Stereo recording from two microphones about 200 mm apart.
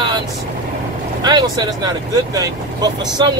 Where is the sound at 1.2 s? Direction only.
20° right (ahead or behind).